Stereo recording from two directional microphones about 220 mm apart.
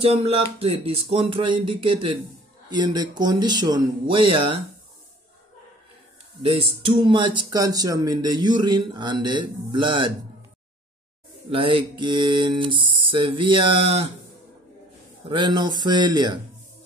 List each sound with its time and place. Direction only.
0.0 s speech: 25° right (ahead or behind)
6.4 s speech: 25° right (ahead or behind)
11.5 s speech: 25° right (ahead or behind)
15.2 s speech: 20° right (ahead or behind)